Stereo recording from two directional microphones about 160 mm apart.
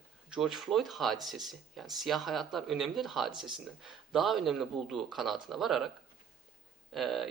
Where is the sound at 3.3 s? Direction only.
30° right (ahead or behind).